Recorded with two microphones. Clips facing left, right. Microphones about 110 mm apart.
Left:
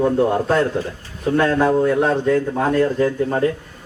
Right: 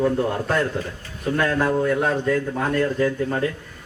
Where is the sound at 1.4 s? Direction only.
25° left (ahead or behind).